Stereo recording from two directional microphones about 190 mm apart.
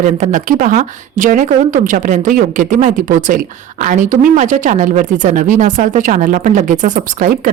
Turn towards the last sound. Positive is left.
turn(degrees=-40)  # may be behind; listen again after turning